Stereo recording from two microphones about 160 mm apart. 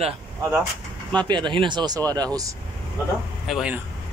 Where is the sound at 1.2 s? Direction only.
30° right (ahead or behind).